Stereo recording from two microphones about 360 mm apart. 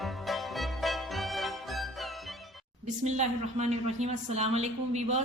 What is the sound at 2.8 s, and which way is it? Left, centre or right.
A woman's voice, centre.